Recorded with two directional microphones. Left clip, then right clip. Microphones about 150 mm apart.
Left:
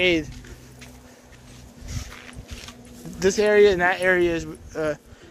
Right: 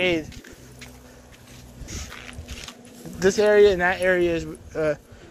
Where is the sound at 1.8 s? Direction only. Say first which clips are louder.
Right 2 dB; 90° right.